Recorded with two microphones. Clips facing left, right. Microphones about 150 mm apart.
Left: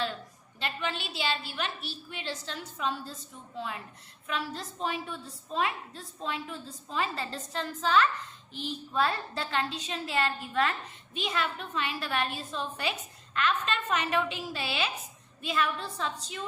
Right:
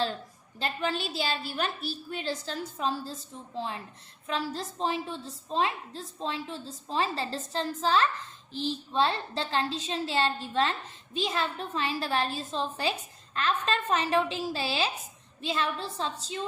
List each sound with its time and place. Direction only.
0.6 s a woman's voice: 40° right (ahead or behind)